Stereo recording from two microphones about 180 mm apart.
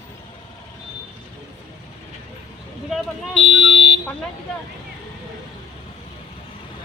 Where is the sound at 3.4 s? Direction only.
35° right (ahead or behind).